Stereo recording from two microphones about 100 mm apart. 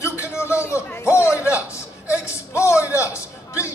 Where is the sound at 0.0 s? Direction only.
25° left (ahead or behind).